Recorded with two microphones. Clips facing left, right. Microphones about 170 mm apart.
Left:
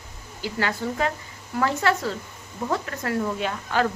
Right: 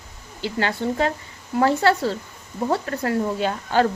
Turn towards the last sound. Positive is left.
turn(degrees=-30)  # may be behind; listen again after turning